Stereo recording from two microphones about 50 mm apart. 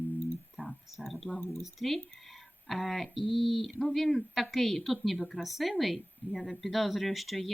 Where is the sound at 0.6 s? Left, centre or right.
Left.